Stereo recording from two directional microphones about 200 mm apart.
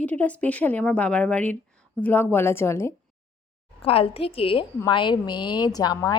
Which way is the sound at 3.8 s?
30° left (ahead or behind).